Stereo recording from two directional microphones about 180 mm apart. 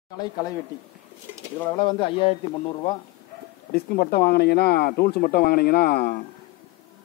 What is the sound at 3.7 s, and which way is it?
Speech, 55° left (ahead or behind).